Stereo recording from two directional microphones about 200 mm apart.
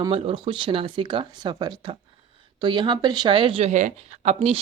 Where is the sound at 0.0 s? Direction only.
25° right (ahead or behind).